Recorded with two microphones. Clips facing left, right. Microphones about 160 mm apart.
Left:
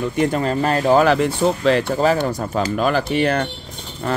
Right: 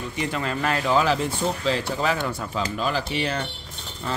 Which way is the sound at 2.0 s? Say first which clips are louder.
Left 7 dB; 40° left (ahead or behind).